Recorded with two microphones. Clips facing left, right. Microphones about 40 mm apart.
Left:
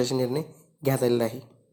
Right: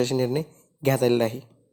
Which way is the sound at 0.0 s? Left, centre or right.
Right.